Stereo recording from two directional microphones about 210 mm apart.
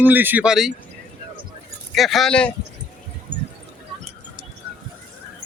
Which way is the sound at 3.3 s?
25° right (ahead or behind).